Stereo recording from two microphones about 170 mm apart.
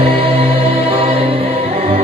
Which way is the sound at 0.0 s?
35° right (ahead or behind).